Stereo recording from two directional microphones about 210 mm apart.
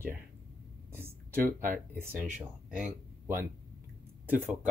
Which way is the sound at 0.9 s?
10° right (ahead or behind).